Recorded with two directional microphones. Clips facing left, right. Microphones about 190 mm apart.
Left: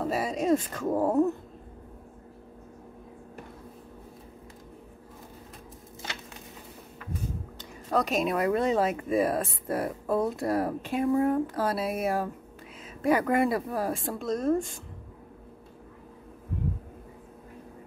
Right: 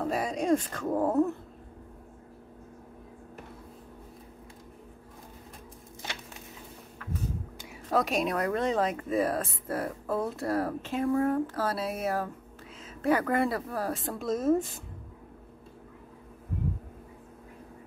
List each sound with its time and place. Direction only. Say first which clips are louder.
0.0 s a sound: left 1 dB; centre (ahead or behind)
0.7 s speech: left 2 dB; 5° left (ahead or behind)
7.5 s speech: even; centre (ahead or behind)
14.1 s a woman's voice: right 1 dB; centre (ahead or behind)